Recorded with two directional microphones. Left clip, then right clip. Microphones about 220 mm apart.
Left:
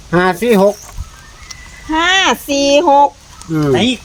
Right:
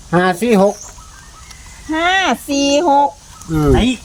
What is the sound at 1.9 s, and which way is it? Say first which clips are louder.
Speech: left 3 dB; 55° left (ahead or behind).